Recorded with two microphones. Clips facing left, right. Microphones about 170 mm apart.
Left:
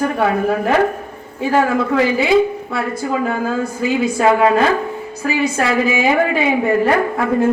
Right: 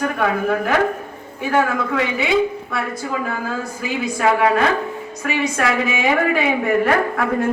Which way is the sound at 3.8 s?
30° left (ahead or behind).